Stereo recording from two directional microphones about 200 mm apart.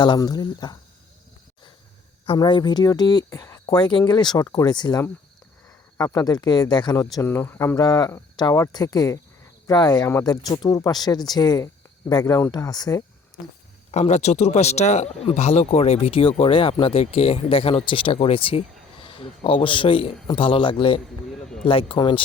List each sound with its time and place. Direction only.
0.0 s speech: 20° left (ahead or behind)
2.2 s speech: 25° left (ahead or behind)
13.9 s speech: 35° left (ahead or behind)
21.4 s a sound: 5° left (ahead or behind)
21.7 s speech: 25° left (ahead or behind)